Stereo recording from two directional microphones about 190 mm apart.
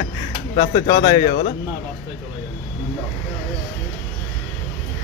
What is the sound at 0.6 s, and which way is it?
Speech, 45° left (ahead or behind).